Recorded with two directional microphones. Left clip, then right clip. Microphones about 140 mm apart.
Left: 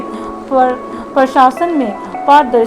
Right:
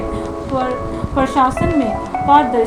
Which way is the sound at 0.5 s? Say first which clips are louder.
Left 8 dB; 40° left (ahead or behind).